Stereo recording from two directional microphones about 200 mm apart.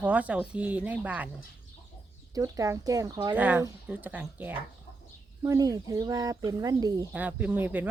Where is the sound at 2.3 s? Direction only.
15° right (ahead or behind).